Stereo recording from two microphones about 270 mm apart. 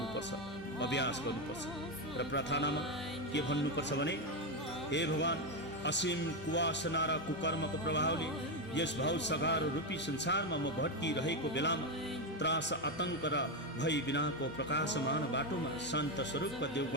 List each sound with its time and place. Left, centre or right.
0.8 s speech: left
2.1 s speech: left